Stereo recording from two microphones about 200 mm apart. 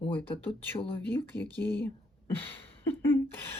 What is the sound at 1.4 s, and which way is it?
Speech, 20° right (ahead or behind).